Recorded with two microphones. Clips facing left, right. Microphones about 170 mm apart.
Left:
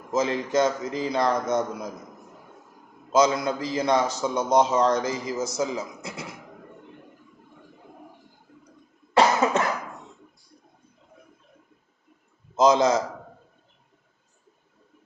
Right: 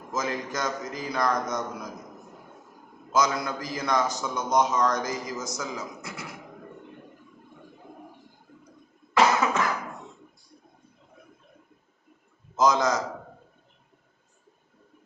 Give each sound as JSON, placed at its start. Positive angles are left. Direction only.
{"t": 0.1, "sound": "a man's voice", "side_deg": 25}
{"t": 3.1, "sound": "a man's voice", "side_deg": 25}
{"t": 9.1, "sound": "cough", "side_deg": 30}
{"t": 12.5, "sound": "a man's voice", "side_deg": 25}